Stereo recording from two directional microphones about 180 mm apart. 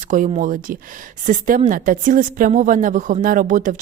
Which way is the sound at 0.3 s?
45° right (ahead or behind).